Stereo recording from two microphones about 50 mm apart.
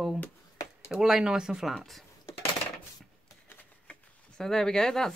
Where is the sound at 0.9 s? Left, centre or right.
Centre.